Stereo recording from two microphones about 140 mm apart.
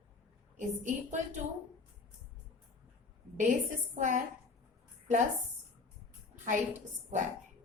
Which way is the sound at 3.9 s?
65° right (ahead or behind).